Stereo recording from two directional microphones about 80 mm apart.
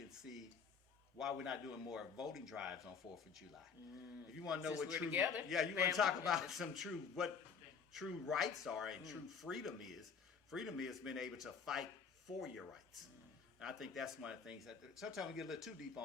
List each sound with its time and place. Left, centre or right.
1.2 s speech: centre
4.4 s speech: centre
4.9 s a man's voice: right
6.0 s speech: centre